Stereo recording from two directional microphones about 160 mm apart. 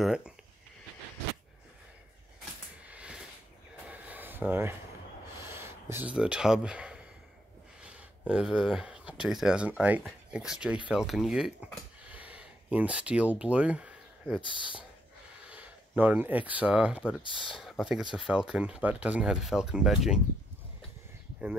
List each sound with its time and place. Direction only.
0.0 s speech: 5° right (ahead or behind)
2.9 s a sound: 5° right (ahead or behind)
5.4 s speech: 15° right (ahead or behind)
14.4 s speech: 30° left (ahead or behind)
15.4 s speech: 10° right (ahead or behind)